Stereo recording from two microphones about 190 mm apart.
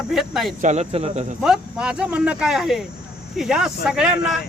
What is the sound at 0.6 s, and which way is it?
Speech, 35° right (ahead or behind).